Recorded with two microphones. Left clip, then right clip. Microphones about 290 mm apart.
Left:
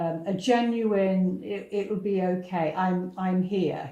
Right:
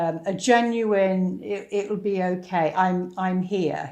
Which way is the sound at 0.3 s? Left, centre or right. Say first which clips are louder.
Right 5 dB; right.